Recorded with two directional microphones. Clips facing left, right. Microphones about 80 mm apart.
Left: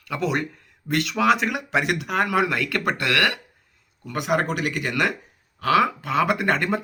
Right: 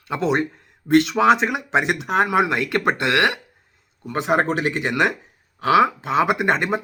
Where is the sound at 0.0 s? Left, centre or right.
Right.